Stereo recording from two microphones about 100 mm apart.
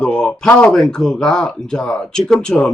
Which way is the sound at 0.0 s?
10° left (ahead or behind).